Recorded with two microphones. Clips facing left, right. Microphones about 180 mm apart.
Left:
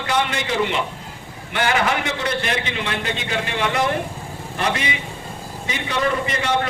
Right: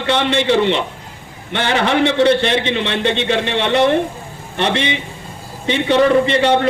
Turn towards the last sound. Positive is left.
turn(degrees=-30)  # may be behind; listen again after turning